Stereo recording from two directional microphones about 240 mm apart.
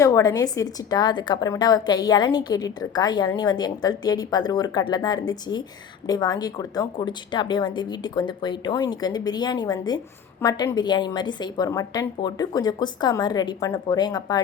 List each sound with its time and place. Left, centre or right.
0.0 s a woman's voice: centre